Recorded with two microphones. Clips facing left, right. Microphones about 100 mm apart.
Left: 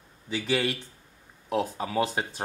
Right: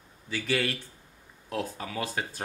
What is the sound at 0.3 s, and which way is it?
Speech, 20° left (ahead or behind).